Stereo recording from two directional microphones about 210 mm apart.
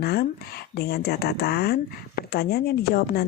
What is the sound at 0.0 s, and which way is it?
Speech, 50° left (ahead or behind).